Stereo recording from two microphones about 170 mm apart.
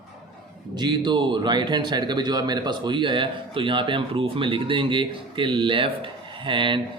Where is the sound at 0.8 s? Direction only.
25° right (ahead or behind).